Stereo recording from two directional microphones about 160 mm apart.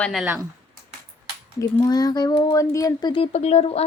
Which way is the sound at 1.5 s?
20° left (ahead or behind).